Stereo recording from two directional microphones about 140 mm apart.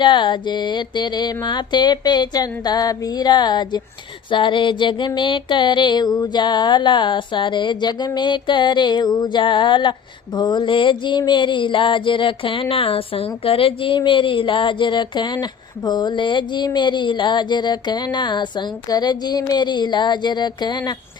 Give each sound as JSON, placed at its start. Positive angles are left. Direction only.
{"t": 0.0, "sound": "mantra", "side_deg": 35}